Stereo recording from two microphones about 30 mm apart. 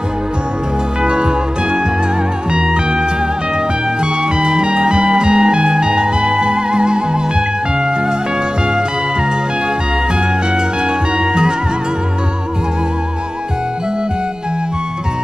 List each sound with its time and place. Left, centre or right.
1.0 s music: right
11.1 s music: right